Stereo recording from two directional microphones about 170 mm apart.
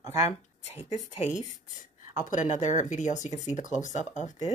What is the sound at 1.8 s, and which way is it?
Speech, 50° left (ahead or behind).